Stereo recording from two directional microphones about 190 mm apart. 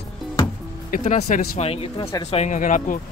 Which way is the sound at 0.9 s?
45° left (ahead or behind).